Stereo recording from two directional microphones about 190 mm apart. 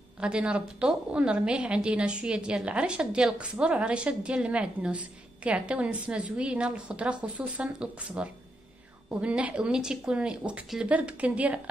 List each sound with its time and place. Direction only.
0.2 s a woman's voice: 5° right (ahead or behind)